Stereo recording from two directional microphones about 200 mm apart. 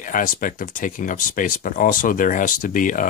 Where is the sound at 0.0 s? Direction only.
40° left (ahead or behind).